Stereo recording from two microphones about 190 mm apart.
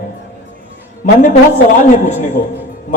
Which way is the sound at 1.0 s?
45° left (ahead or behind).